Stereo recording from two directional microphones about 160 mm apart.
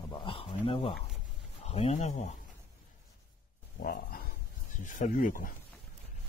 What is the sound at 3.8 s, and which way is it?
Roaring cats, 65° left (ahead or behind).